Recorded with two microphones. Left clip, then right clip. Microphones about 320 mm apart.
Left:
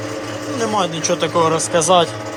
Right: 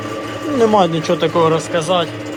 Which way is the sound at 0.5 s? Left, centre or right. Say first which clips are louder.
Right 7 dB; centre.